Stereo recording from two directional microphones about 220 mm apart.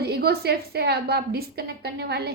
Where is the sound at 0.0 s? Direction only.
45° right (ahead or behind).